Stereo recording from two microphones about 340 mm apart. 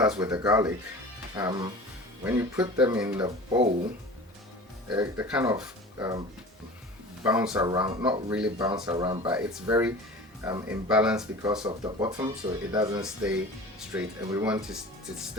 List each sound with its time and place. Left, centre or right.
0.0 s speech: centre
4.9 s speech: centre
7.3 s speech: centre